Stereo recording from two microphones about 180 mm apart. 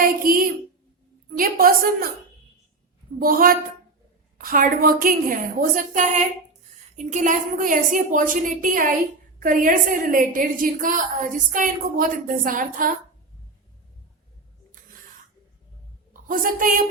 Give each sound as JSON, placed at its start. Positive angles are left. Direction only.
{"t": 0.2, "sound": "a sound", "side_deg": -50}
{"t": 1.4, "sound": "a woman's voice", "side_deg": -55}
{"t": 3.2, "sound": "a woman's voice", "side_deg": -55}
{"t": 16.3, "sound": "a woman's voice", "side_deg": -50}